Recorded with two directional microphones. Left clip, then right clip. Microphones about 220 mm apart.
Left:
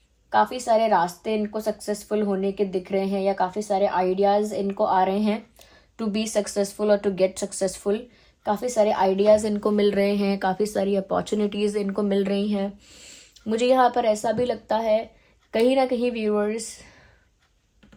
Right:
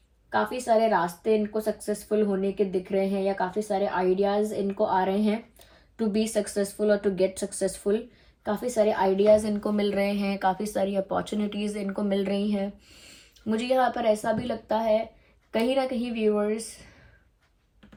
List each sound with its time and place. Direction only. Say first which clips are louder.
0.5 s speech: left 2 dB; 30° left (ahead or behind)
2.2 s speech: left 1 dB; 30° left (ahead or behind)
9.4 s a woman's voice: left 6 dB; 45° left (ahead or behind)